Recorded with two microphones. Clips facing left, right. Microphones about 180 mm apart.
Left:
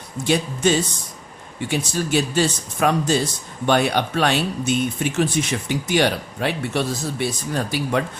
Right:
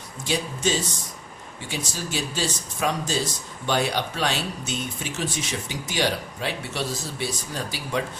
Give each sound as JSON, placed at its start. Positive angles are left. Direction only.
{"t": 0.3, "sound": "speech", "side_deg": 60}